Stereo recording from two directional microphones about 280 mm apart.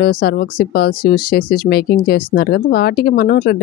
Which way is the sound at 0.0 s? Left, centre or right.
Left.